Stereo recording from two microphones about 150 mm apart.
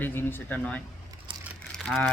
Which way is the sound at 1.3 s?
35° right (ahead or behind).